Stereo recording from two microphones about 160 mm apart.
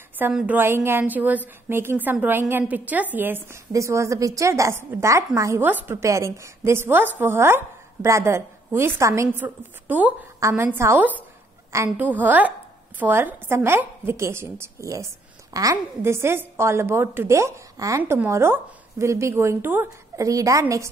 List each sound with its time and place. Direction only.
0.2 s a woman's voice: 5° right (ahead or behind)